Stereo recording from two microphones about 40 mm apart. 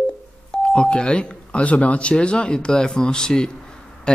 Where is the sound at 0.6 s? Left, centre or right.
Left.